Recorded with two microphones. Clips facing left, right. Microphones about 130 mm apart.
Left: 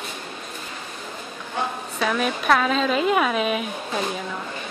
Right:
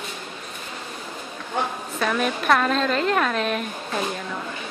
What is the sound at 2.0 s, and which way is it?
A woman's voice, centre (ahead or behind).